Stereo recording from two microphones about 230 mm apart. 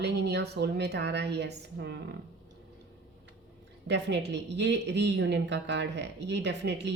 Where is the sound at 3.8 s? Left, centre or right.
Right.